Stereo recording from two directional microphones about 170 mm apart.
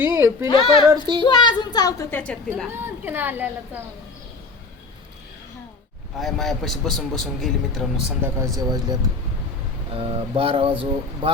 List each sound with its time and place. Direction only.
0.0 s a sound: 15° right (ahead or behind)
0.4 s a woman's voice: 30° left (ahead or behind); by 2.4 s 10° left (ahead or behind)
2.7 s a child's voice: 15° right (ahead or behind)
6.1 s a man's voice: centre (ahead or behind)
8.5 s speech: 20° right (ahead or behind)
9.9 s speech: 35° right (ahead or behind)